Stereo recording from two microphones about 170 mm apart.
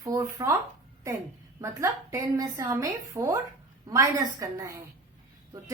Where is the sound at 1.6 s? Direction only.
20° right (ahead or behind).